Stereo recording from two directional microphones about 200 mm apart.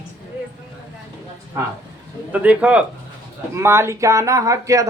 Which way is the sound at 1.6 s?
10° right (ahead or behind).